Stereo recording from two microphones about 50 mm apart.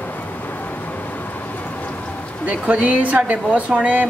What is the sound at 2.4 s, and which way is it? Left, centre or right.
Speech, right.